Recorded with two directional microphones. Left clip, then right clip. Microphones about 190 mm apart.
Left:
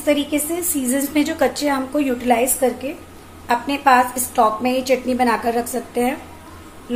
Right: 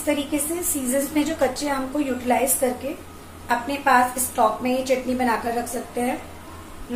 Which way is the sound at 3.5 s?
50° left (ahead or behind).